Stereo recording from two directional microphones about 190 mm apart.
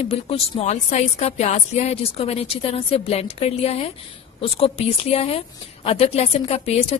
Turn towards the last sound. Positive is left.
turn(degrees=35)  # may be behind; listen again after turning